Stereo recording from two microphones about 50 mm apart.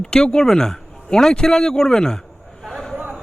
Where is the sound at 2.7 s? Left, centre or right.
Centre.